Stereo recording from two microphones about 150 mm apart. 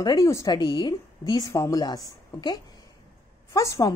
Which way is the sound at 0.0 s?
25° left (ahead or behind).